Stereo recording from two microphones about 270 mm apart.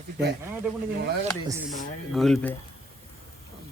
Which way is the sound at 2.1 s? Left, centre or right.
Centre.